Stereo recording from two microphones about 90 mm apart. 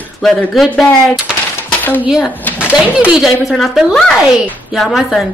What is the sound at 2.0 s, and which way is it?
A woman's voice, 5° right (ahead or behind).